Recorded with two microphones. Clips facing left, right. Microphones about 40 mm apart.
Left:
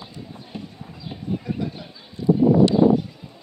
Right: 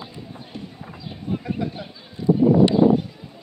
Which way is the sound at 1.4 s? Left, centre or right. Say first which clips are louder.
Right 1 dB; centre.